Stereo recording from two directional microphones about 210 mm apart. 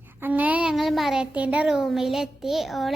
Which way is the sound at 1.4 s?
5° right (ahead or behind).